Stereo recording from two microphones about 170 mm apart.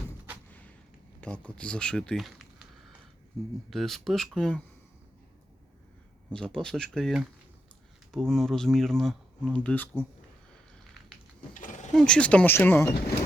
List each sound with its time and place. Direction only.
1.2 s speech: 5° left (ahead or behind)
3.7 s speech: centre (ahead or behind)
6.3 s speech: 5° left (ahead or behind)
11.5 s a sound: 50° left (ahead or behind)
11.9 s speech: 5° left (ahead or behind)